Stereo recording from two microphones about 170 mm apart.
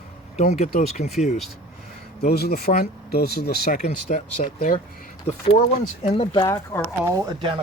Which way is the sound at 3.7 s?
45° left (ahead or behind).